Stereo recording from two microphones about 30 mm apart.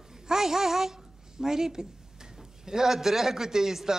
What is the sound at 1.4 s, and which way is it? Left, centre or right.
A man's voice, centre.